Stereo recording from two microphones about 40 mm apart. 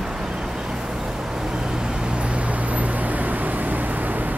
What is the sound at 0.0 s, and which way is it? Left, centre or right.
Vehicle, centre.